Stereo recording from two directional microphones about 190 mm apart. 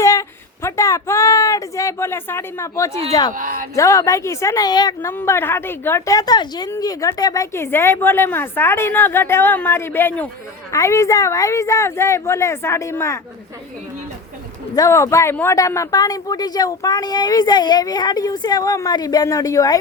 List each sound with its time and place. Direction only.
0.0 s a sound: 15° left (ahead or behind)
3.1 s speech: 20° left (ahead or behind)
3.3 s speech: 45° right (ahead or behind)
3.8 s a woman's voice: 15° left (ahead or behind)
14.8 s speech: 15° left (ahead or behind)